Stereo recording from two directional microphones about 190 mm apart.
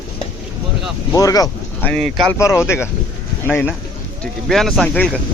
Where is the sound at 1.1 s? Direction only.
20° left (ahead or behind).